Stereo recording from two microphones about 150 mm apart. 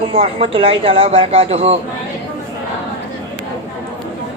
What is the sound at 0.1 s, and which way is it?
A woman's voice, 40° right (ahead or behind).